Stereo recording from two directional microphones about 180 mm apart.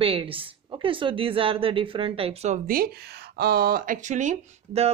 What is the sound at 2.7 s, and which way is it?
Speech, 60° right (ahead or behind).